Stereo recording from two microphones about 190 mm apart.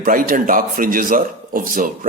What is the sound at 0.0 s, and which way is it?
Speech, 45° right (ahead or behind).